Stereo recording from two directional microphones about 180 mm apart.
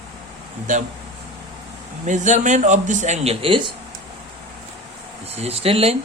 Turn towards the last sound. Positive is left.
turn(degrees=-35)  # may be behind; listen again after turning